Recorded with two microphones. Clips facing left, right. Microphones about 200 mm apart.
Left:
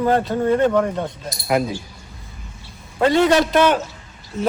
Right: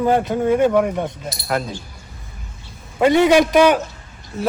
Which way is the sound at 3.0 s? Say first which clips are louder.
Right 2 dB; 15° right (ahead or behind).